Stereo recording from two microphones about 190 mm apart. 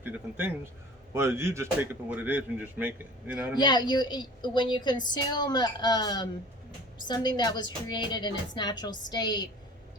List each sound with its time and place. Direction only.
0.0 s a man's voice: 10° right (ahead or behind)
3.6 s a woman's voice: 25° left (ahead or behind)